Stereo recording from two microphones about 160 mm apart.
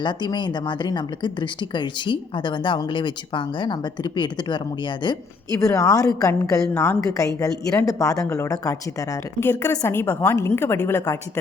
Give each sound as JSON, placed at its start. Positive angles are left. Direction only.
{"t": 0.0, "sound": "a woman's voice", "side_deg": 30}